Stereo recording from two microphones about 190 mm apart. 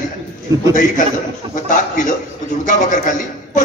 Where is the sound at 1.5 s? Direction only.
45° left (ahead or behind).